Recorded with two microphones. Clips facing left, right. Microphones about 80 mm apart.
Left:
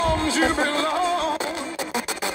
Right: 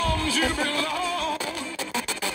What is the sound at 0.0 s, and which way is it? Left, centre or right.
Music, left.